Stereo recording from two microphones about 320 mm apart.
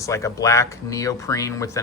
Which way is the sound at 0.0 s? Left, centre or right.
Centre.